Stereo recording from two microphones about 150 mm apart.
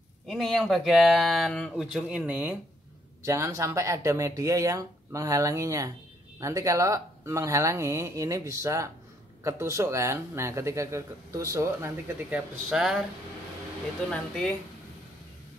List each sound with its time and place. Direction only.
0.3 s speech: centre (ahead or behind)